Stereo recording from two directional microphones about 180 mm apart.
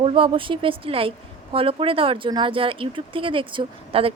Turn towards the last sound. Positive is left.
turn(degrees=-30)  # may be behind; listen again after turning